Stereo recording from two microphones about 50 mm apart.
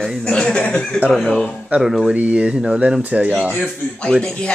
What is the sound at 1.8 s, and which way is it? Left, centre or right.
Speech, centre.